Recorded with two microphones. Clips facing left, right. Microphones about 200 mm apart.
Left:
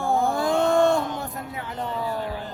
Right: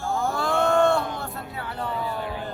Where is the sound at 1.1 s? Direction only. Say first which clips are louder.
Left 1 dB; 15° left (ahead or behind).